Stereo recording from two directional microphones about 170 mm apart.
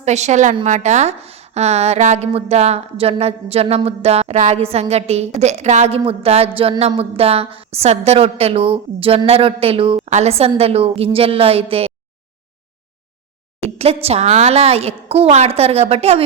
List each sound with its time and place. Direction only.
0.0 s a woman's voice: 40° right (ahead or behind)
13.7 s a woman's voice: 35° right (ahead or behind)